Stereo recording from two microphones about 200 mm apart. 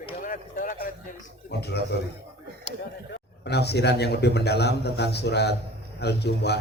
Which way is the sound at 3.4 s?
55° left (ahead or behind).